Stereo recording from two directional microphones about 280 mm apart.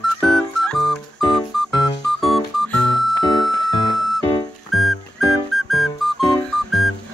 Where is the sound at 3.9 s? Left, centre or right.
Centre.